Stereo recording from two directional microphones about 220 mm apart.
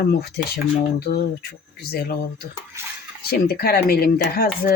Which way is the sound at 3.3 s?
45° left (ahead or behind).